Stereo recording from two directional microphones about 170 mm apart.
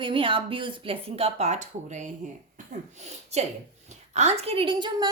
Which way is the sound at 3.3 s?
40° right (ahead or behind).